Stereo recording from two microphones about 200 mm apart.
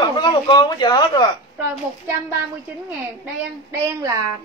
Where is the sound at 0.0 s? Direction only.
20° left (ahead or behind).